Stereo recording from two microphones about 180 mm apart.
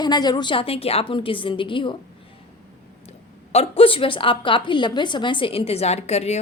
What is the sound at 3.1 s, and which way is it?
A woman's voice, 35° left (ahead or behind).